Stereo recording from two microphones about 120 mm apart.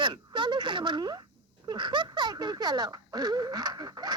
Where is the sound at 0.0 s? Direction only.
40° right (ahead or behind).